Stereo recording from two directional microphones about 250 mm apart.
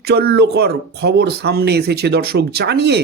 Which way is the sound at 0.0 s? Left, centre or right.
Right.